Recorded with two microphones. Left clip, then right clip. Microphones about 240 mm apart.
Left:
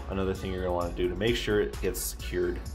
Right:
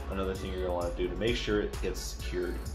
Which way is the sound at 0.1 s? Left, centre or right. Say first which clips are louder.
Left 3 dB; left.